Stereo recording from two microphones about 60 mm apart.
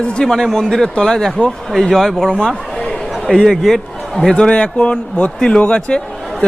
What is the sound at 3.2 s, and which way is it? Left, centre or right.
A man's voice, centre.